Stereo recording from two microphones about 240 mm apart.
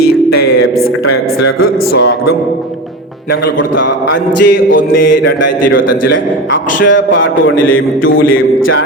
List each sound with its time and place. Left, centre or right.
0.3 s a man's voice: left
4.3 s music: left
6.1 s a man's voice: left